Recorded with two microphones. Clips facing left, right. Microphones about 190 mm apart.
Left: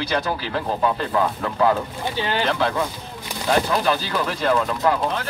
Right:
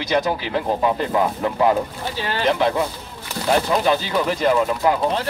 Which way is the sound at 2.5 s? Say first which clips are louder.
Right 3 dB; 15° right (ahead or behind).